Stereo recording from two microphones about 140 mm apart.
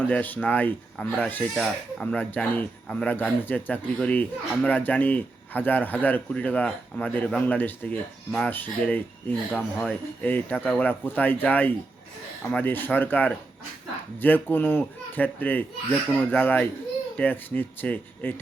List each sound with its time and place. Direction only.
0.1 s speech: 10° left (ahead or behind)